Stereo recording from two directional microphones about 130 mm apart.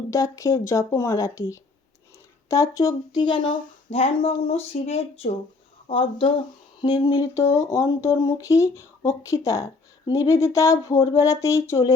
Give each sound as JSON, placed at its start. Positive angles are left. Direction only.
{"t": 0.1, "sound": "speech", "side_deg": 25}
{"t": 3.8, "sound": "speech", "side_deg": 50}